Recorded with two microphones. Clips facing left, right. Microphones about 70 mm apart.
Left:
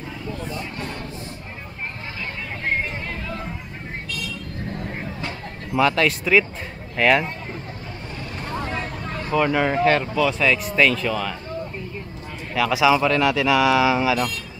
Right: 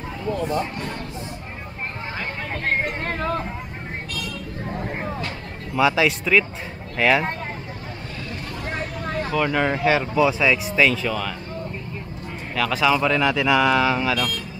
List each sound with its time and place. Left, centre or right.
0.3 s speech: right
2.8 s music: right
5.8 s speech: centre
8.7 s vehicle: right
9.3 s speech: centre
12.5 s speech: centre